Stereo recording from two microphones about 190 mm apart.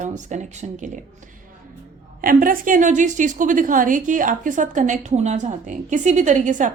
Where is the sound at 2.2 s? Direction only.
50° right (ahead or behind).